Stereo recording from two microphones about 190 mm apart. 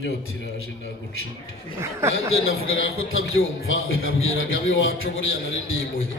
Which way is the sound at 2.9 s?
90° left.